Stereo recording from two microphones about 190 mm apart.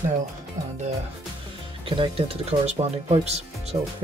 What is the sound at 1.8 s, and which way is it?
Speech, 25° right (ahead or behind).